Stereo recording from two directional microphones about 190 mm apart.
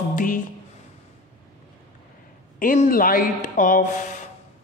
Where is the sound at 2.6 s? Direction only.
45° left (ahead or behind).